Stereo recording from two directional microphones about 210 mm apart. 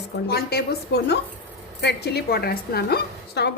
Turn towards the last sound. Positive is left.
turn(degrees=50)  # may be behind; listen again after turning